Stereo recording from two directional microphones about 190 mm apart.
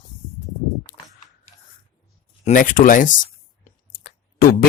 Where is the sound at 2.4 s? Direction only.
45° left (ahead or behind).